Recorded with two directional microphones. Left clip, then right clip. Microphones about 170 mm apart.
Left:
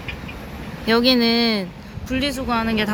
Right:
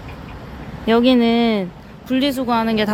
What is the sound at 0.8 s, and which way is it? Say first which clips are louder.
Speech: right 2 dB; 20° right (ahead or behind).